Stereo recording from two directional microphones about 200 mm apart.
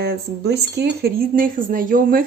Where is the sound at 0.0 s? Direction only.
55° right (ahead or behind).